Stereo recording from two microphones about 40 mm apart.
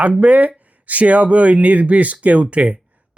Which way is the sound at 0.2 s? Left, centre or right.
Right.